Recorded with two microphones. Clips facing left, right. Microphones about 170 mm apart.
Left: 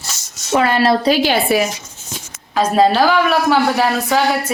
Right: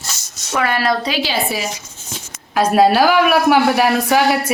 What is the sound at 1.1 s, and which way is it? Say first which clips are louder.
Speech: left 6 dB; 55° left (ahead or behind).